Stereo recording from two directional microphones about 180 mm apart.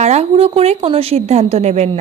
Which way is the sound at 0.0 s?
35° right (ahead or behind).